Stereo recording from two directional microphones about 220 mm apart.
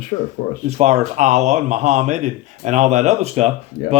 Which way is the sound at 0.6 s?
30° right (ahead or behind).